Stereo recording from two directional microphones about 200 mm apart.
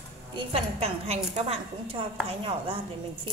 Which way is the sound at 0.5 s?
30° right (ahead or behind).